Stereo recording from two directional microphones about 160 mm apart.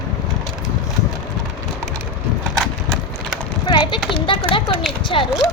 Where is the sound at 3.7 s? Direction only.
25° left (ahead or behind).